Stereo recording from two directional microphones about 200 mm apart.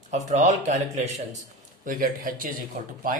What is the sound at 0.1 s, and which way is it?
Speech, 35° right (ahead or behind).